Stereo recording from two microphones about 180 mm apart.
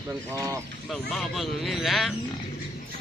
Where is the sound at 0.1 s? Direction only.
15° right (ahead or behind).